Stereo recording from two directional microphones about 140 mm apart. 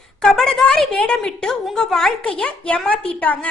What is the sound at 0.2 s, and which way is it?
A woman's voice, 5° left (ahead or behind).